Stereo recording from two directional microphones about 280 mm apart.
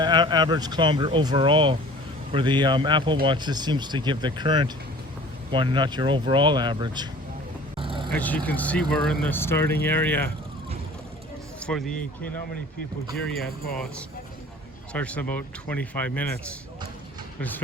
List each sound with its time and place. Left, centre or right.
0.0 s speech: centre
7.8 s vehicle: centre
8.1 s speech: centre
11.6 s speech: centre
14.9 s speech: centre